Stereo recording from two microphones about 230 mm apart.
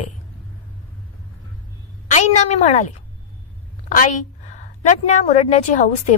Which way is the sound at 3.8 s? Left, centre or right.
Left.